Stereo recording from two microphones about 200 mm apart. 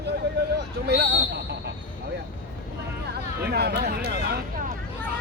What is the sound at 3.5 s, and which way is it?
Speech, 55° right (ahead or behind).